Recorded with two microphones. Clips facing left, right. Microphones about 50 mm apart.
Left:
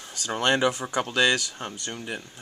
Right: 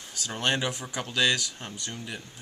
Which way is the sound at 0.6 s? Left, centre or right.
Left.